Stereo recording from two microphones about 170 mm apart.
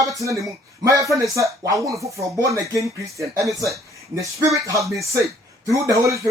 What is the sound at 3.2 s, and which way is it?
Speech, centre (ahead or behind).